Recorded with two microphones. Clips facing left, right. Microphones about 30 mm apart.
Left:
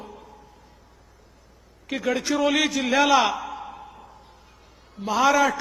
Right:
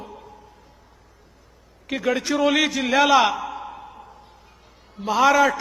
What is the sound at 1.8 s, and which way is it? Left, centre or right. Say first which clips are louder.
A man's voice: right 2 dB; centre.